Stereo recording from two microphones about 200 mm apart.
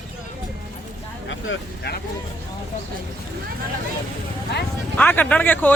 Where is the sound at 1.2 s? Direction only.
70° left (ahead or behind).